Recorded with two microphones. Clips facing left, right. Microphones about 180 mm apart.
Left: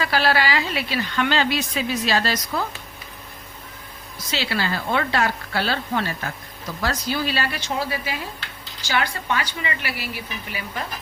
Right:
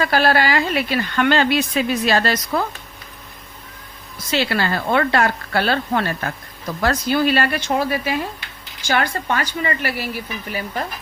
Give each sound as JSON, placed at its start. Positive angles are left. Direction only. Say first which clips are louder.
{"t": 0.0, "sound": "speech", "louder": "right 4 dB", "side_deg": -50}
{"t": 4.3, "sound": "a woman's voice", "louder": "right 5 dB", "side_deg": -55}